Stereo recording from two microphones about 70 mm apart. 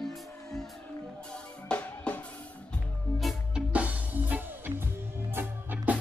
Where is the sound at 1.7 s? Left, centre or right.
Left.